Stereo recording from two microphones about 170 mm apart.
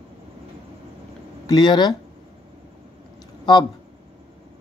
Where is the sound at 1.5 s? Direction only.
25° left (ahead or behind).